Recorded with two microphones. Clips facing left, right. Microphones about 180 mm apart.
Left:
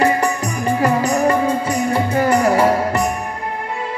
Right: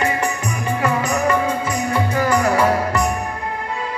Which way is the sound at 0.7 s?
35° left (ahead or behind).